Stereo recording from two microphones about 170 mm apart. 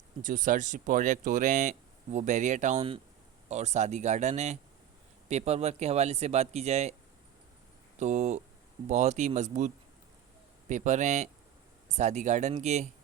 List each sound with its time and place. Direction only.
0.2 s speech: 50° right (ahead or behind)
7.9 s speech: 45° right (ahead or behind)